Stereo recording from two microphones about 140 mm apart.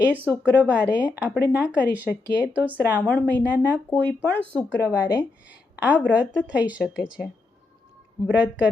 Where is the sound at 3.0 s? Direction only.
10° left (ahead or behind).